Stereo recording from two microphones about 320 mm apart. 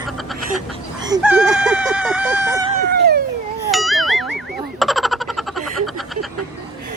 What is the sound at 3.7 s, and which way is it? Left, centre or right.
Music, centre.